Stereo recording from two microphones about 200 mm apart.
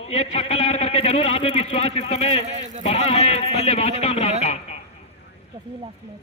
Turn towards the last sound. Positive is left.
turn(degrees=30)  # may be behind; listen again after turning